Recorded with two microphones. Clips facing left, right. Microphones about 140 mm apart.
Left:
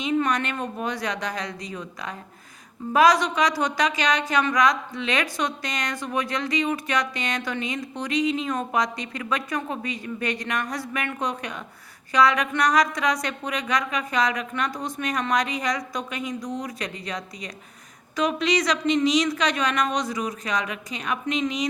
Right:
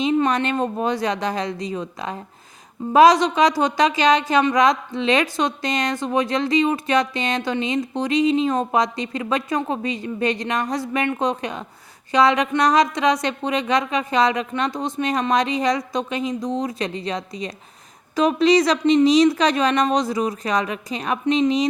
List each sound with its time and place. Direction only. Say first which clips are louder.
0.0 s a woman's voice: right 5 dB; 30° right (ahead or behind)